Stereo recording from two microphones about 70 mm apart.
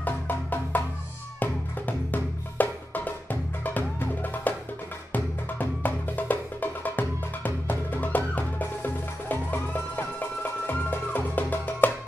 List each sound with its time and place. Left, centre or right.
0.0 s music: left